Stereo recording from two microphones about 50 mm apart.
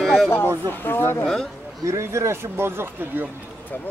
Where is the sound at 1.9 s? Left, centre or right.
Right.